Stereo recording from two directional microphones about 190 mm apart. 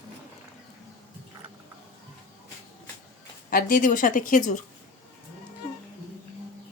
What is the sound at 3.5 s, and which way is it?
A woman's voice, 45° left (ahead or behind).